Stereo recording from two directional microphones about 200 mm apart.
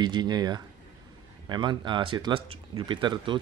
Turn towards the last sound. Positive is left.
turn(degrees=-25)  # may be behind; listen again after turning